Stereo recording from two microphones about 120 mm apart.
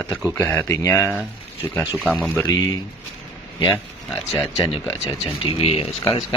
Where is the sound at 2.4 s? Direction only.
35° left (ahead or behind).